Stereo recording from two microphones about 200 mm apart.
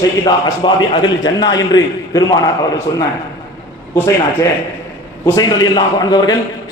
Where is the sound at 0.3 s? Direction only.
20° left (ahead or behind).